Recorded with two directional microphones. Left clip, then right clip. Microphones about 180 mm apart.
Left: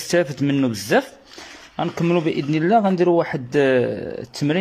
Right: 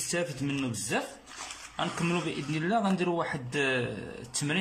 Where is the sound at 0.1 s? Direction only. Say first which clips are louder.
Left 14 dB; 40° left (ahead or behind).